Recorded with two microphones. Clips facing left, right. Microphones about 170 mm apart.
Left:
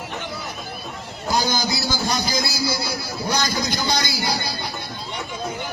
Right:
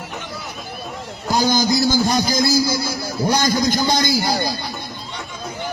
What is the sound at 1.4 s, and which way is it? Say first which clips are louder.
A man's voice: right 8 dB; 50° right (ahead or behind).